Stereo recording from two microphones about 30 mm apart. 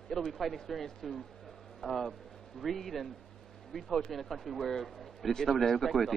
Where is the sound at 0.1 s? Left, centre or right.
Centre.